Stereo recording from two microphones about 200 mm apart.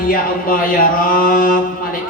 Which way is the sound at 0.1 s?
45° left (ahead or behind).